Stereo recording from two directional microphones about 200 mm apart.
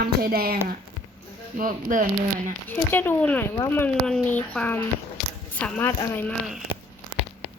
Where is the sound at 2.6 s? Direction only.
10° left (ahead or behind).